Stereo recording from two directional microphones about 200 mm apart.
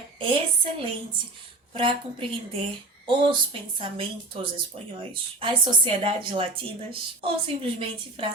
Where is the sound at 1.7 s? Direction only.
25° right (ahead or behind).